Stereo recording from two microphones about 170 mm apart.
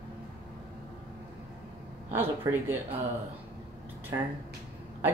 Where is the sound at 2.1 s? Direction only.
15° right (ahead or behind).